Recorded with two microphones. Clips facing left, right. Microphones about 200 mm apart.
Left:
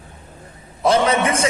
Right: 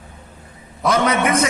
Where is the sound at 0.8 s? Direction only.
30° left (ahead or behind).